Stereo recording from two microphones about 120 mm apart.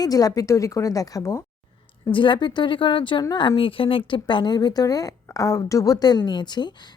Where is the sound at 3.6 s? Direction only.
45° left (ahead or behind).